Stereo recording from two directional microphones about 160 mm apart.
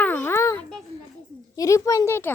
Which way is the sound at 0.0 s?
10° left (ahead or behind).